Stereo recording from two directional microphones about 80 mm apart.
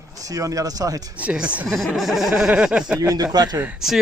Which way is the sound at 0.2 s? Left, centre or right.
Right.